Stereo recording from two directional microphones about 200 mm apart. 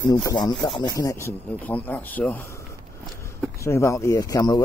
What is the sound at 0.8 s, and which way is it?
Speech, 15° left (ahead or behind).